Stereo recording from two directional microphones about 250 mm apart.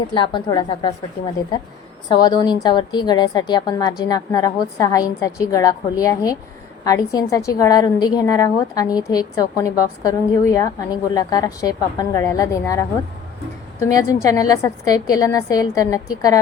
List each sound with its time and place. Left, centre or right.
0.1 s a woman's voice: centre
13.8 s a woman's voice: centre